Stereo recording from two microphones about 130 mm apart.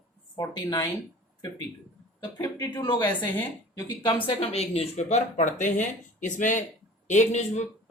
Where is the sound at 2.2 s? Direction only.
30° left (ahead or behind).